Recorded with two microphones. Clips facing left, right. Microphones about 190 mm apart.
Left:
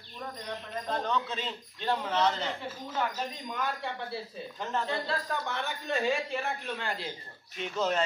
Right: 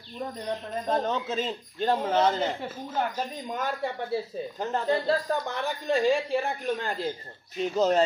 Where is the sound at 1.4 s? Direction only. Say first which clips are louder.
Right 5 dB; 35° right (ahead or behind).